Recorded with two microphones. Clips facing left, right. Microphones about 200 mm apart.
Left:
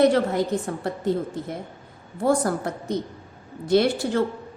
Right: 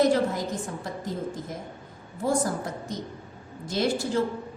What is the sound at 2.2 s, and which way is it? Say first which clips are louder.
A woman's voice: left 4 dB; 65° left (ahead or behind).